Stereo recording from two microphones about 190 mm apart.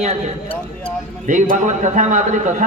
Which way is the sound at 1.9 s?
40° right (ahead or behind).